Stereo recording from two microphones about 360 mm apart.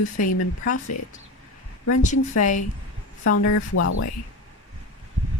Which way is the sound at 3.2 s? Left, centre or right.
Left.